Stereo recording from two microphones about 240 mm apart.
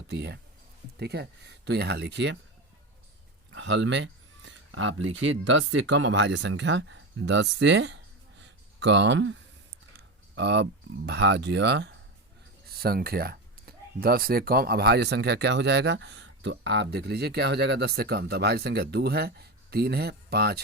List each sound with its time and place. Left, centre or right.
0.1 s speech: right
3.5 s speech: right